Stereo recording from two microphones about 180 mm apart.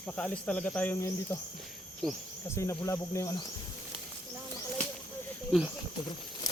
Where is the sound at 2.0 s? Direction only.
Centre (ahead or behind).